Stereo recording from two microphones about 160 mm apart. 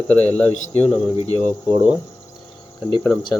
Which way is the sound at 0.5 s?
45° left (ahead or behind).